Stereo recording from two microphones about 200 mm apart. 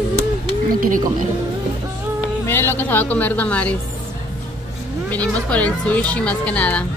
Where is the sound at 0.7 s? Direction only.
45° right (ahead or behind).